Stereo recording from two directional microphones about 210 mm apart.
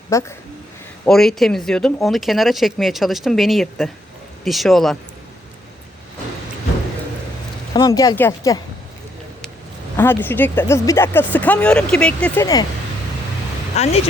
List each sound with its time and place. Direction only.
0.1 s speech: 15° left (ahead or behind)
1.0 s speech: centre (ahead or behind)
7.7 s speech: 15° left (ahead or behind)
10.0 s speech: 10° left (ahead or behind)
13.7 s speech: 30° left (ahead or behind)